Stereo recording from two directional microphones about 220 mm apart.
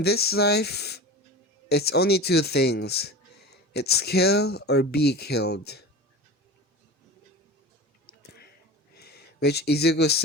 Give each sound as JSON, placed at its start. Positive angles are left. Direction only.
{"t": 0.0, "sound": "speech", "side_deg": 45}
{"t": 8.0, "sound": "a sound", "side_deg": 45}
{"t": 9.0, "sound": "speech", "side_deg": 45}